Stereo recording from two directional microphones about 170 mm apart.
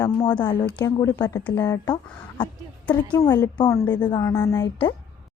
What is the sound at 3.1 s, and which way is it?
Speech, 20° left (ahead or behind).